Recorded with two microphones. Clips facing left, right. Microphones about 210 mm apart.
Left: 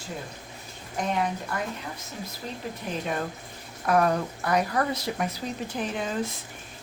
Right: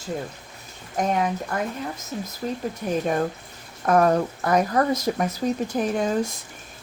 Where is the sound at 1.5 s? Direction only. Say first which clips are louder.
Right 5 dB; 45° right (ahead or behind).